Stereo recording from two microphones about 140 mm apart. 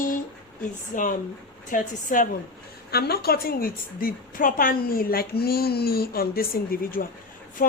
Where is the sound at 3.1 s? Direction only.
90° left.